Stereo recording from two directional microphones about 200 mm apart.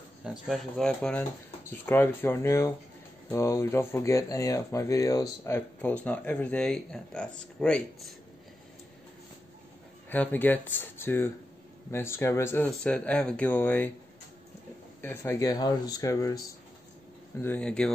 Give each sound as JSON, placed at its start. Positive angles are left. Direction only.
{"t": 0.2, "sound": "speech", "side_deg": 0}
{"t": 10.0, "sound": "speech", "side_deg": 10}
{"t": 15.0, "sound": "speech", "side_deg": 10}
{"t": 17.4, "sound": "speech", "side_deg": 10}